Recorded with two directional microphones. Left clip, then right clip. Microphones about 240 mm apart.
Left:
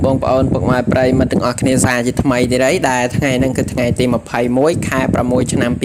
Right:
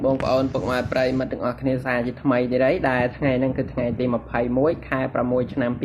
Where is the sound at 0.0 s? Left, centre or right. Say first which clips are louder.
Left 6 dB; left.